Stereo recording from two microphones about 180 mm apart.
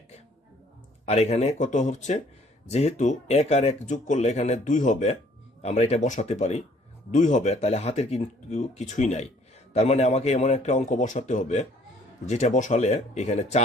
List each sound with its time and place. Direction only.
1.0 s speech: 35° left (ahead or behind)